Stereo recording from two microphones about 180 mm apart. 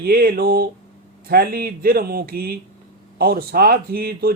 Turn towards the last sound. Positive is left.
turn(degrees=-55)  # may be behind; listen again after turning